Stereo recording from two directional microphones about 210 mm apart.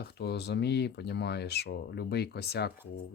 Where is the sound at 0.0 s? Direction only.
50° left (ahead or behind).